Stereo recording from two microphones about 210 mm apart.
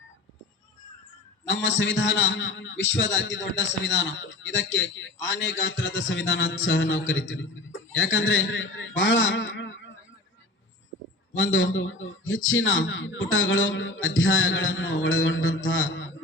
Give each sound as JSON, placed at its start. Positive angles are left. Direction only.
{"t": 1.5, "sound": "a man's voice", "side_deg": 60}
{"t": 11.3, "sound": "a man's voice", "side_deg": 65}